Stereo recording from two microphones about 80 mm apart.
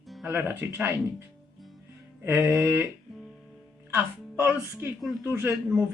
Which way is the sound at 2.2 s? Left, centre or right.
Right.